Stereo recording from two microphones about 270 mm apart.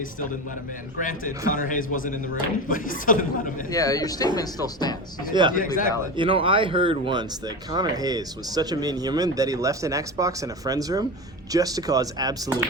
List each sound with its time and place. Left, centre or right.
1.0 s a man's voice: left
3.7 s speech: centre
5.3 s speech: centre
5.5 s a woman's voice: left
6.1 s speech: centre